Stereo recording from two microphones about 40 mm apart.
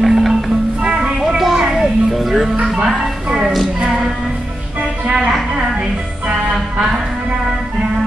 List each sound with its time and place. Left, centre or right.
0.0 s music: centre
0.8 s music: right
1.5 s music: centre
2.6 s music: centre